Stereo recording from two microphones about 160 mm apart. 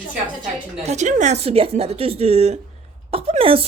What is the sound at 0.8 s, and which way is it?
Speech, 50° right (ahead or behind).